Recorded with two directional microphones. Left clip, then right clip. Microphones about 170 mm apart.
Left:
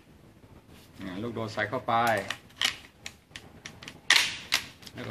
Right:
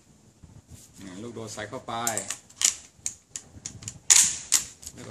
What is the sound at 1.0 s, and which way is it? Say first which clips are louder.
Typewriter: left 4 dB; 15° right (ahead or behind).